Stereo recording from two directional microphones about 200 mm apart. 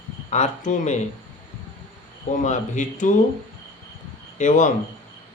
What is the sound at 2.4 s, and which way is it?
Speech, 40° left (ahead or behind).